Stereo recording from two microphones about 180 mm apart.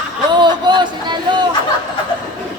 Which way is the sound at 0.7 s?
25° right (ahead or behind).